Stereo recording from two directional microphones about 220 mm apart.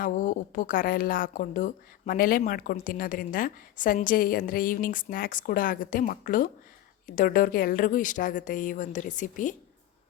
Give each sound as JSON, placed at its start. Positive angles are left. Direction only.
{"t": 0.0, "sound": "a woman's voice", "side_deg": 40}